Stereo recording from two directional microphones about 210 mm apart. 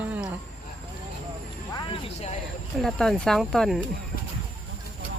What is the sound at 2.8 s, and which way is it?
Speech, 5° left (ahead or behind).